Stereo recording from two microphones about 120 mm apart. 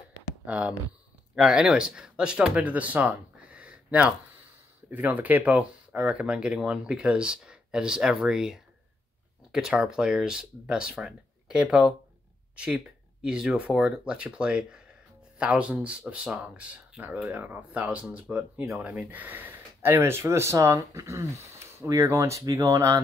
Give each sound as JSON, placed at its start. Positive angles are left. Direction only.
{"t": 0.5, "sound": "speech", "side_deg": -10}